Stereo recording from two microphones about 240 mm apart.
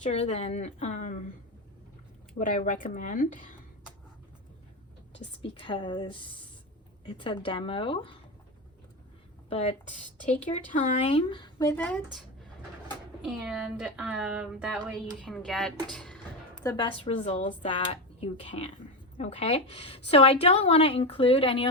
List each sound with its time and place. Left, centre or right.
0.0 s a woman's voice: left
2.4 s speech: left
5.4 s a woman's voice: left
9.5 s a woman's voice: left; by 12.0 s centre
13.2 s speech: centre
16.6 s a woman's voice: centre